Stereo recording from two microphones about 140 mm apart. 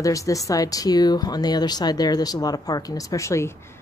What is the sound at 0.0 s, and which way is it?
Speech, 25° left (ahead or behind).